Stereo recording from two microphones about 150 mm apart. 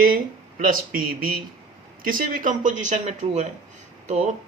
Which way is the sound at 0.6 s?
70° right (ahead or behind).